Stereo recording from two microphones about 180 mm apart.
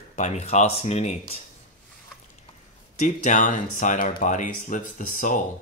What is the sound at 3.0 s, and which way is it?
Speech, 45° left (ahead or behind).